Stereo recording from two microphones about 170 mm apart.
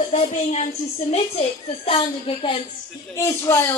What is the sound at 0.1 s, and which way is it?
Speech, 40° left (ahead or behind).